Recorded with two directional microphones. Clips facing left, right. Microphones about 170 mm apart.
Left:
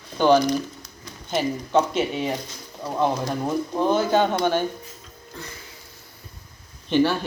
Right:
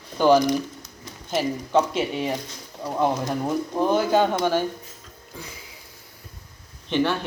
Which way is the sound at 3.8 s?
10° right (ahead or behind).